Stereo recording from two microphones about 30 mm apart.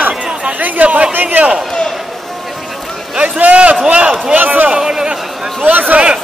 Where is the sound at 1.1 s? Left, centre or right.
Right.